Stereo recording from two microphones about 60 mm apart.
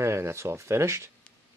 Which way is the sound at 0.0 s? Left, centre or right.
Right.